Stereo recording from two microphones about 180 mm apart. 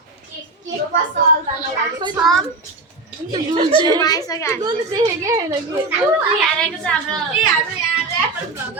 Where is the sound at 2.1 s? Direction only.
Centre (ahead or behind).